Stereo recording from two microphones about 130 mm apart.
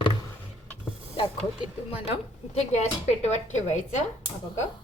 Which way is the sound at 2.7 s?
60° left (ahead or behind).